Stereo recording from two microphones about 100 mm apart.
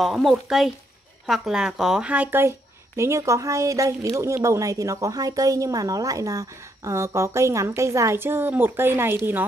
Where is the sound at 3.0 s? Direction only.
30° right (ahead or behind).